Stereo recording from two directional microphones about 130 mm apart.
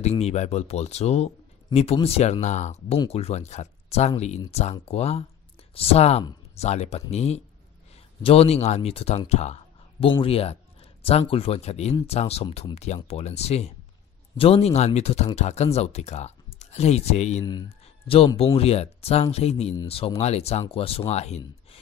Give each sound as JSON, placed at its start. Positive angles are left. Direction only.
{"t": 0.0, "sound": "speech", "side_deg": 55}
{"t": 2.4, "sound": "speech", "side_deg": 65}
{"t": 17.6, "sound": "speech", "side_deg": 45}